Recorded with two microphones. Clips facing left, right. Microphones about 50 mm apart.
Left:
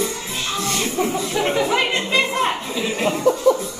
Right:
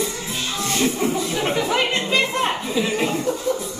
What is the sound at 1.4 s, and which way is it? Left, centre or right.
Music, centre.